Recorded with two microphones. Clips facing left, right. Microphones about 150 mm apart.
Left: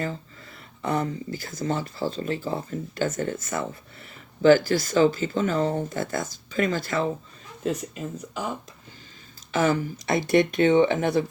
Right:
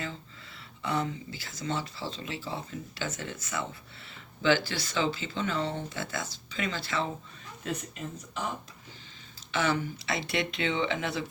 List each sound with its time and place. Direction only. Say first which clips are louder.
0.0 s speech: left 8 dB; 45° left (ahead or behind)
9.5 s speech: left 6 dB; 45° left (ahead or behind)